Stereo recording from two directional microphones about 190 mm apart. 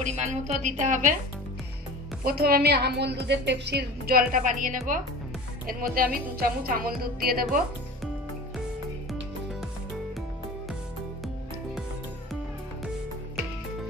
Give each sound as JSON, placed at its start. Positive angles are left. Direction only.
{"t": 0.0, "sound": "a woman's voice", "side_deg": -40}
{"t": 2.2, "sound": "a woman's voice", "side_deg": -50}